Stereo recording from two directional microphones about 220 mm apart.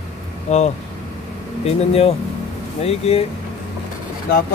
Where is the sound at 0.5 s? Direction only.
30° left (ahead or behind).